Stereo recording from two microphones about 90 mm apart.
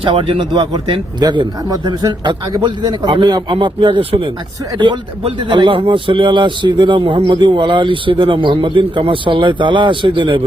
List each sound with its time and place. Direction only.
0.0 s a man's voice: 80° right